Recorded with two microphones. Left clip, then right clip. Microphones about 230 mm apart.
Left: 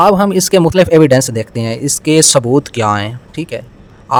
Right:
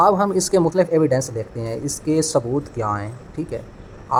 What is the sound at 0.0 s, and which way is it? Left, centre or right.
Speech, left.